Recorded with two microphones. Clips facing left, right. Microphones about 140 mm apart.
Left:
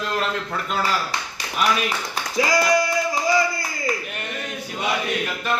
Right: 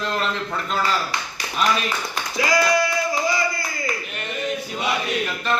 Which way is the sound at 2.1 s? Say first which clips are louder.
Even; 35° left (ahead or behind).